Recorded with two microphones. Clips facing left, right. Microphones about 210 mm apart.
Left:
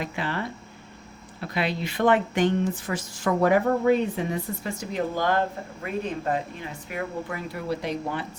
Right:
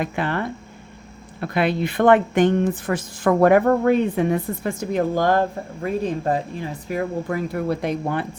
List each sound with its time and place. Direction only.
0.0 s speech: 55° right (ahead or behind)
5.8 s speech: 35° right (ahead or behind); by 8.3 s 55° right (ahead or behind)